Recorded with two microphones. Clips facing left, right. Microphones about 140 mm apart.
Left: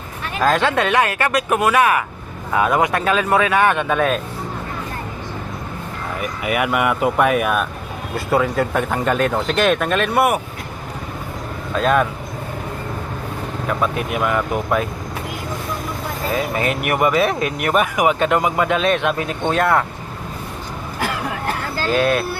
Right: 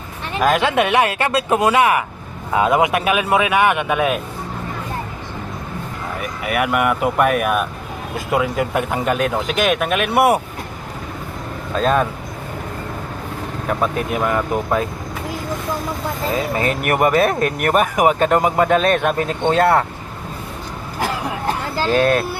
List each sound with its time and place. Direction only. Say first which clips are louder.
0.3 s speech: right 1 dB; 15° right (ahead or behind)
6.4 s speech: right 1 dB; centre (ahead or behind)
11.8 s speech: even; 30° right (ahead or behind)
13.7 s speech: right 1 dB; 35° right (ahead or behind)
16.3 s speech: even; 30° right (ahead or behind)
16.8 s speech: right 2 dB; 45° right (ahead or behind)
19.5 s speech: right 3 dB; 30° right (ahead or behind)
21.9 s speech: right 2 dB; 40° right (ahead or behind)